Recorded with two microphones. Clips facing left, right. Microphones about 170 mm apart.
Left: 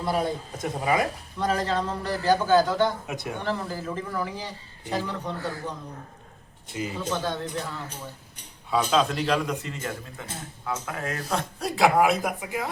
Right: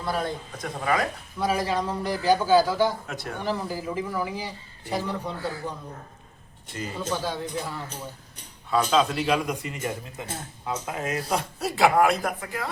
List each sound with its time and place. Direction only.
0.1 s speech: 10° left (ahead or behind)
0.5 s speech: 20° left (ahead or behind)
1.4 s a man's voice: 10° right (ahead or behind)
3.1 s speech: 20° left (ahead or behind)
3.4 s a man's voice: 10° right (ahead or behind)
7.0 s a man's voice: 5° right (ahead or behind)
8.7 s a man's voice: centre (ahead or behind)
11.7 s speech: centre (ahead or behind); by 12.7 s 15° left (ahead or behind)